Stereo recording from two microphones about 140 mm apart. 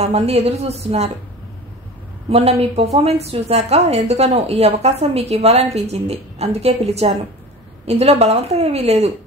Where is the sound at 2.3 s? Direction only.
45° right (ahead or behind).